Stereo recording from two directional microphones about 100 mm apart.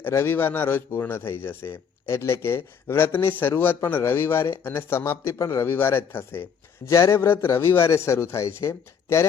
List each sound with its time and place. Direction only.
0.0 s speech: 25° left (ahead or behind)